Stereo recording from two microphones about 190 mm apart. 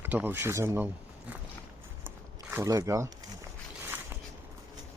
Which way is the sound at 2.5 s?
15° right (ahead or behind).